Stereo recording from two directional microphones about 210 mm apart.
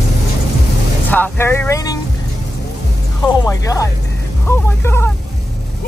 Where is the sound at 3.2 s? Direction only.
15° left (ahead or behind).